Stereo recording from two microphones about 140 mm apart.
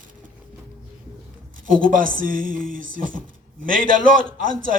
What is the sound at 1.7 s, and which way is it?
Speech, 75° right (ahead or behind).